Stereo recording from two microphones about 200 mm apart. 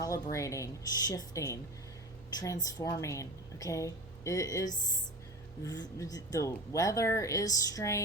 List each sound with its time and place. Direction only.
0.0 s speech: 15° left (ahead or behind)
2.6 s speech: 20° left (ahead or behind)